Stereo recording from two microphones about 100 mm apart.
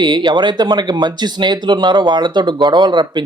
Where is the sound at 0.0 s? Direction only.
50° right (ahead or behind).